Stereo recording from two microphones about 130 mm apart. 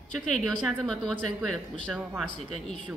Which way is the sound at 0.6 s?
5° left (ahead or behind).